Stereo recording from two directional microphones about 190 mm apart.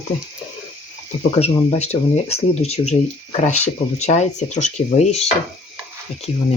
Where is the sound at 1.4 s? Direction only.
35° left (ahead or behind).